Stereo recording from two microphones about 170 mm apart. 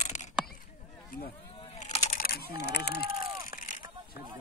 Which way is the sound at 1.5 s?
35° left (ahead or behind).